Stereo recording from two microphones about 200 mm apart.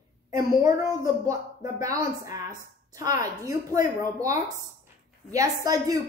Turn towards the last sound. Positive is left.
turn(degrees=-15)  # may be behind; listen again after turning